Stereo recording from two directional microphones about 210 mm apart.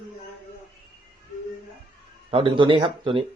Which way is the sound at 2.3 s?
25° right (ahead or behind).